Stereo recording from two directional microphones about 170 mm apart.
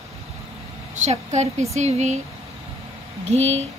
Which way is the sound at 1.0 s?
40° right (ahead or behind).